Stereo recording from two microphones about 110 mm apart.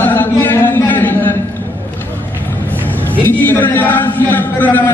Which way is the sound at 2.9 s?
15° left (ahead or behind).